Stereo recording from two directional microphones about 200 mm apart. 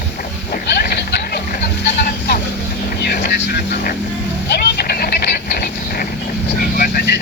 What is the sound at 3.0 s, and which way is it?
Speech, 55° left (ahead or behind).